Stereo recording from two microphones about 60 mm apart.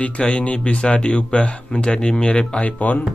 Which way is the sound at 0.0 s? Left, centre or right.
Left.